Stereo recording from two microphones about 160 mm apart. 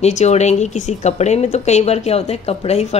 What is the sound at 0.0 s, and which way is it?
A woman's voice, 45° left (ahead or behind).